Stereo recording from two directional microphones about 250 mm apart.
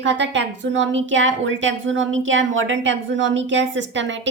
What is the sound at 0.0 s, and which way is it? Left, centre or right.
A woman's voice, right.